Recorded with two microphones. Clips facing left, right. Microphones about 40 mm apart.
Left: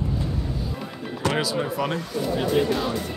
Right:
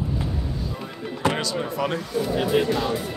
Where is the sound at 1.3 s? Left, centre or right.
Centre.